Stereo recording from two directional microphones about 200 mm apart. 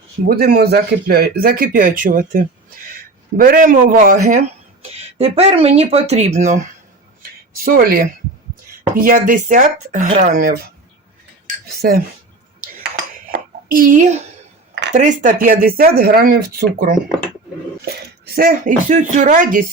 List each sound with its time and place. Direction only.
0.3 s speech: 50° right (ahead or behind)
11.8 s speech: 50° right (ahead or behind)
13.3 s a sound: 45° right (ahead or behind)
14.9 s speech: 40° right (ahead or behind)
18.3 s speech: 45° right (ahead or behind)